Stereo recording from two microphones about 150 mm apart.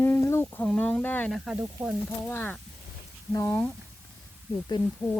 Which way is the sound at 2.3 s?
15° left (ahead or behind).